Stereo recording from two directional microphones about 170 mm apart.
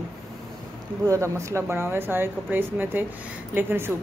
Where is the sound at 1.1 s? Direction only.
15° right (ahead or behind).